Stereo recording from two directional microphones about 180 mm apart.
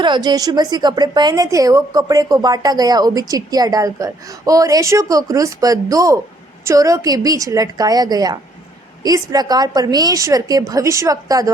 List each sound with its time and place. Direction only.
0.0 s a woman's voice: 25° right (ahead or behind)